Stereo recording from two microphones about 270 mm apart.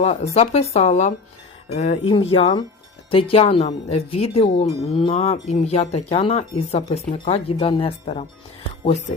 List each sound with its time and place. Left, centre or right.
0.0 s cattle: left